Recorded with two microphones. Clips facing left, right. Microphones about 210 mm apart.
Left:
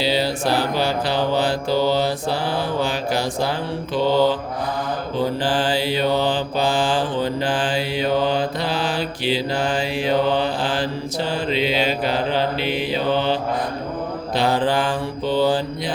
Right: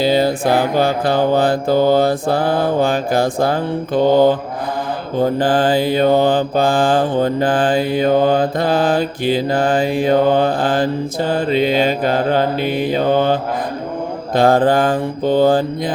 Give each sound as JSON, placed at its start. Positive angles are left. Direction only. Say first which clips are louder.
{"t": 0.0, "sound": "mantra", "louder": "right 6 dB", "side_deg": -50}